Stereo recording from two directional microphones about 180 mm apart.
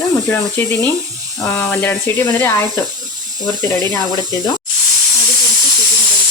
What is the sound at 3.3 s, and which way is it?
Speech, 20° right (ahead or behind).